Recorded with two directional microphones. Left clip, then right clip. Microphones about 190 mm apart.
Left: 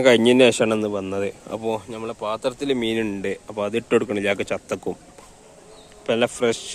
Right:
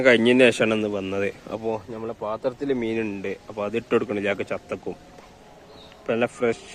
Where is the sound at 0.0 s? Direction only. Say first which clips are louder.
Left 2 dB; 20° left (ahead or behind).